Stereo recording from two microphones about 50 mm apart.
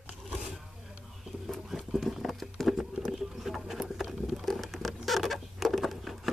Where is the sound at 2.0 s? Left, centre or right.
Centre.